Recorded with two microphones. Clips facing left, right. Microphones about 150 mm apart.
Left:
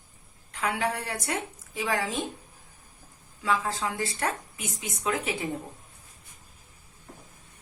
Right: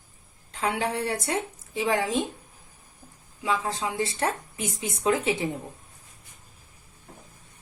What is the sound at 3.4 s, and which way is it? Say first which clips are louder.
A woman's voice: even; 20° right (ahead or behind).